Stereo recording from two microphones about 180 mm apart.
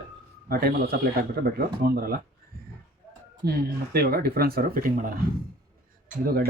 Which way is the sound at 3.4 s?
60° right (ahead or behind).